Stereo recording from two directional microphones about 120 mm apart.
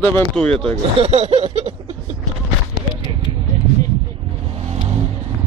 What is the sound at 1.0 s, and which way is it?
Snicker, 60° right (ahead or behind).